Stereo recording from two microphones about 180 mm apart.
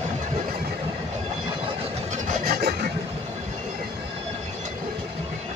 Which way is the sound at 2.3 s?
55° right (ahead or behind).